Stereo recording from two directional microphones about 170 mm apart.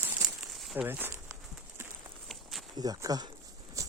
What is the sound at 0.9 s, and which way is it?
Speech, 10° right (ahead or behind).